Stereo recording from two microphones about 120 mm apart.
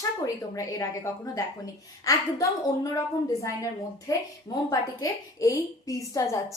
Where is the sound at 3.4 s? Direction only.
25° left (ahead or behind).